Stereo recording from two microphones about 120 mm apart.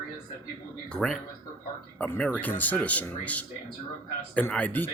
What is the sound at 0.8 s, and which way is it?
Speech, 5° left (ahead or behind).